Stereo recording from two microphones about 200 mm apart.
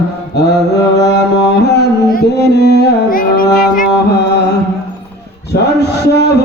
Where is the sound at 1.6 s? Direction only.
55° left (ahead or behind).